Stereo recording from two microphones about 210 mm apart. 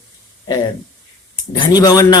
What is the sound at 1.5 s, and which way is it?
Speech, 20° left (ahead or behind).